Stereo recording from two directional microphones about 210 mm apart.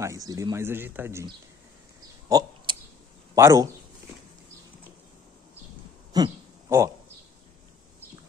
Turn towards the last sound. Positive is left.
turn(degrees=-15)  # may be behind; listen again after turning